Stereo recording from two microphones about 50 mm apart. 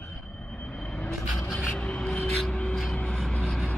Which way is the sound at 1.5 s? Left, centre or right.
Centre.